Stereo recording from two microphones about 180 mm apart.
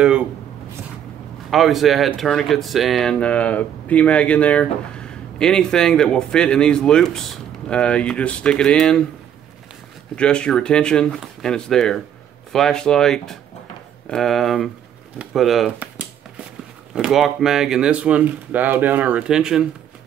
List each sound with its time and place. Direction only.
1.5 s speech: centre (ahead or behind)
10.1 s speech: 5° left (ahead or behind)
15.1 s a sound: centre (ahead or behind)
16.9 s speech: 5° right (ahead or behind)